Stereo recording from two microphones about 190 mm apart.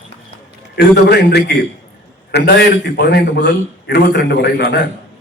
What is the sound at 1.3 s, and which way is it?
A man's voice, 65° left (ahead or behind).